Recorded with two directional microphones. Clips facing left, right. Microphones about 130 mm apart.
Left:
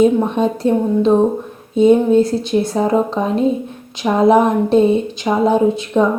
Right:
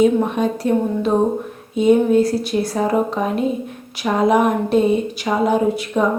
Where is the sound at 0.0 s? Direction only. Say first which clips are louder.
Left 2 dB; 30° left (ahead or behind).